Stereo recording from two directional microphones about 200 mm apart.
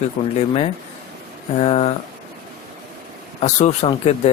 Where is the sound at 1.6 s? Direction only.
30° left (ahead or behind).